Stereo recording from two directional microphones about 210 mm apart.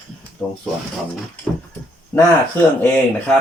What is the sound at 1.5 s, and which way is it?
Speech, 5° left (ahead or behind).